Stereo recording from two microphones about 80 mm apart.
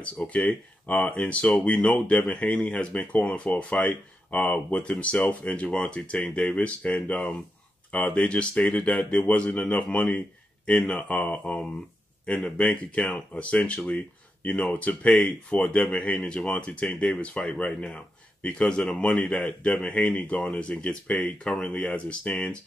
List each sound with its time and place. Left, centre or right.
0.0 s speech: centre